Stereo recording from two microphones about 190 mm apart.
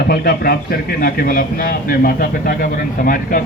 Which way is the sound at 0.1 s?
50° left (ahead or behind).